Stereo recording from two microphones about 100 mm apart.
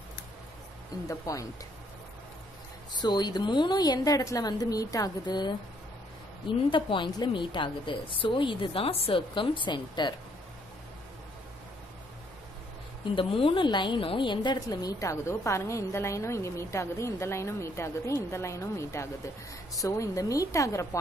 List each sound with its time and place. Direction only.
1.0 s a woman's voice: 35° left (ahead or behind)
2.9 s a woman's voice: 45° left (ahead or behind)
6.4 s a woman's voice: 55° left (ahead or behind)
13.1 s a woman's voice: 65° left (ahead or behind); by 21.0 s 30° left (ahead or behind)